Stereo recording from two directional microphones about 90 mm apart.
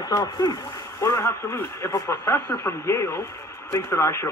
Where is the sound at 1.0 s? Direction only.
35° left (ahead or behind).